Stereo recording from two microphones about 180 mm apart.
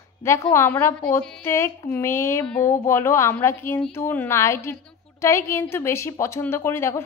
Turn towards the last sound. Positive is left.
turn(degrees=15)  # may be behind; listen again after turning